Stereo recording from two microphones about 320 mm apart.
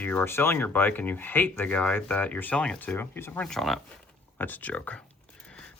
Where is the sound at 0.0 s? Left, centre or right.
Centre.